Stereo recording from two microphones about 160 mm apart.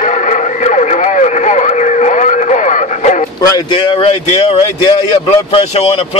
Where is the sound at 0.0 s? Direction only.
50° left (ahead or behind).